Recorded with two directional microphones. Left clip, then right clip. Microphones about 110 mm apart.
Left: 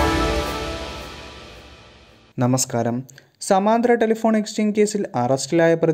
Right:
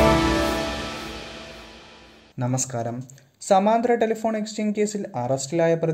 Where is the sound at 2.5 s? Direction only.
35° left (ahead or behind).